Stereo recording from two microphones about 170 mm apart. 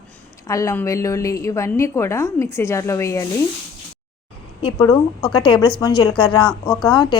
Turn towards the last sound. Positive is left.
turn(degrees=25)  # may be behind; listen again after turning